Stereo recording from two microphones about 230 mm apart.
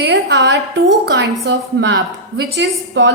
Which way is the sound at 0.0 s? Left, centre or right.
Right.